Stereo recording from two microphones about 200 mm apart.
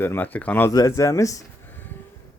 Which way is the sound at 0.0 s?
10° left (ahead or behind).